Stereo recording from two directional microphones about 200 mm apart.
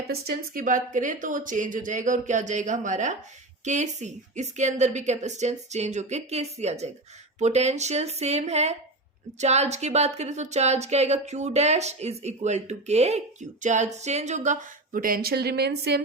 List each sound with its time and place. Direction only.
0.1 s speech: 45° right (ahead or behind)